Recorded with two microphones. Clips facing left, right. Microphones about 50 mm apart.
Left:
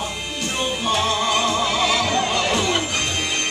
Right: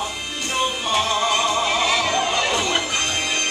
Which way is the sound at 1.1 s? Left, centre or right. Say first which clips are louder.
Even; right.